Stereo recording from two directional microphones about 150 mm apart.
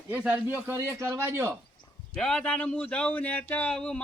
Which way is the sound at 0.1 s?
15° right (ahead or behind).